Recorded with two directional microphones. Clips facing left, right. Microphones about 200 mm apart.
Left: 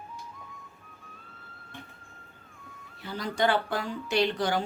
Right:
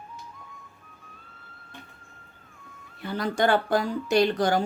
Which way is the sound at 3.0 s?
55° right (ahead or behind).